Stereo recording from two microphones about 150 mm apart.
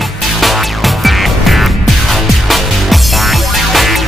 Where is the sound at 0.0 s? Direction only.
Centre (ahead or behind).